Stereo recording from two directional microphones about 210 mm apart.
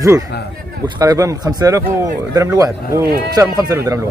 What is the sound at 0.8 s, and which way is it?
Speech, 20° right (ahead or behind).